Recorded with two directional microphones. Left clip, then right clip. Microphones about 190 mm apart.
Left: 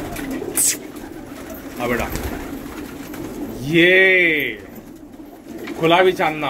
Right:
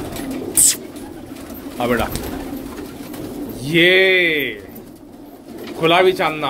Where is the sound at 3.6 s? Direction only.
Centre (ahead or behind).